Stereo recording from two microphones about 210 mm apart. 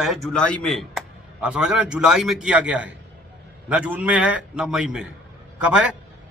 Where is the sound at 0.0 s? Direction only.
Centre (ahead or behind).